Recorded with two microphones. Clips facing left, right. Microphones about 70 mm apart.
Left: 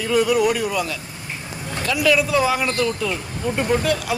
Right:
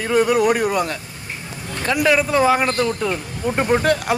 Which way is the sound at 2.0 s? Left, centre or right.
Right.